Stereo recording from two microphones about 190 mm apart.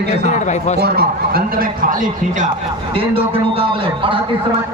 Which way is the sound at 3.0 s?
30° right (ahead or behind).